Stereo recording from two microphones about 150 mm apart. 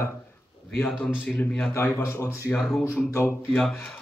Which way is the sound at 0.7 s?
10° left (ahead or behind).